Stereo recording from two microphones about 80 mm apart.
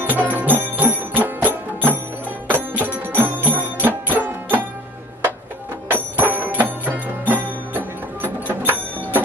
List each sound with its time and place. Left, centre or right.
0.0 s music: right
2.5 s music: right
5.9 s music: right
8.2 s a sound: right